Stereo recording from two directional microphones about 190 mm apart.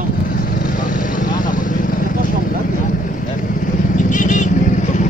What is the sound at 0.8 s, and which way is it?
Vehicle, 45° left (ahead or behind).